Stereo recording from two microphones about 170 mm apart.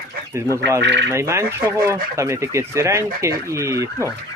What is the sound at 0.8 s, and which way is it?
Speech, 90° right.